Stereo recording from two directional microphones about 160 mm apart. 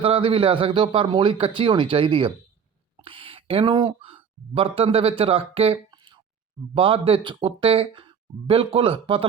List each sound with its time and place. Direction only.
0.0 s speech: 35° right (ahead or behind)